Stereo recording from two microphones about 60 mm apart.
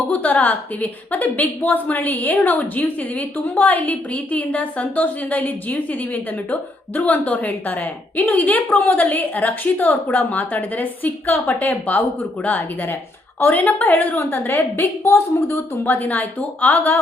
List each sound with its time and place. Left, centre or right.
0.1 s a woman's voice: left
15.8 s a woman's voice: left